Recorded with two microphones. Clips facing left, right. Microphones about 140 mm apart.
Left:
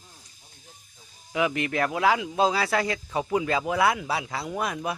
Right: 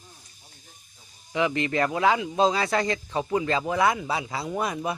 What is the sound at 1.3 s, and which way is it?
Speech, 5° left (ahead or behind).